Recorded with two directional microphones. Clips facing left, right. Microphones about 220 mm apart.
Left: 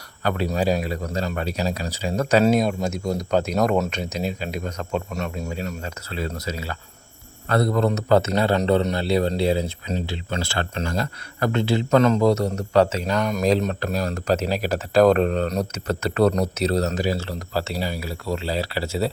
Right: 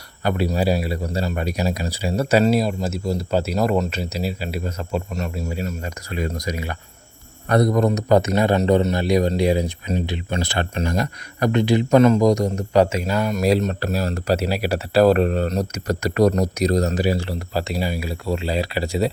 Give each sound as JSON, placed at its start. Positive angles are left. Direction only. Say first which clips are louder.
{"t": 0.2, "sound": "a man's voice", "louder": "right 2 dB", "side_deg": -10}